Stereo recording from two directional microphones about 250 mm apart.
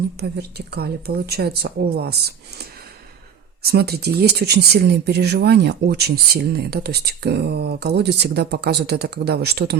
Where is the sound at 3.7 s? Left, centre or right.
Right.